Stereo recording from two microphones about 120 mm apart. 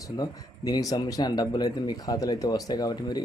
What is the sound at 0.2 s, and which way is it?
Speech, 35° left (ahead or behind).